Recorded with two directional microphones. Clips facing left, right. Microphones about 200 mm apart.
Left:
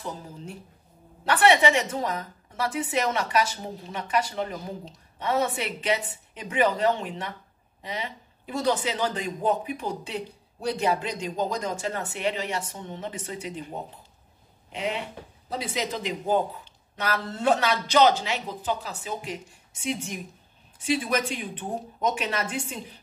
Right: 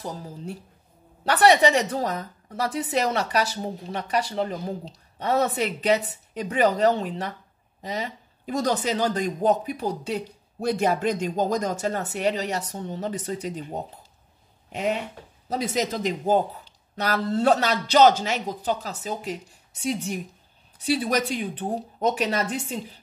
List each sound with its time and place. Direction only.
1.2 s a woman's voice: 40° right (ahead or behind)
14.7 s a woman's voice: 45° right (ahead or behind)